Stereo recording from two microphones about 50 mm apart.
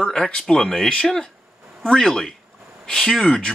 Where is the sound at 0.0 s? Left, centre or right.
Centre.